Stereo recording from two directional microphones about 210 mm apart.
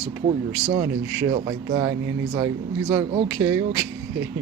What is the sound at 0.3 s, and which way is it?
Speech, 20° right (ahead or behind).